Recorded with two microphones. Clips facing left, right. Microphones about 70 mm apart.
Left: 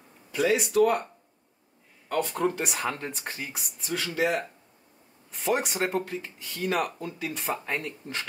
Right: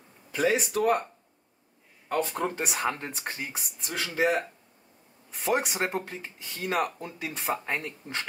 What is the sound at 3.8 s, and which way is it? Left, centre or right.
Speech, right.